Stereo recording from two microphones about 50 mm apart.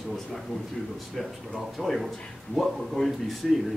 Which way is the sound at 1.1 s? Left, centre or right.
Centre.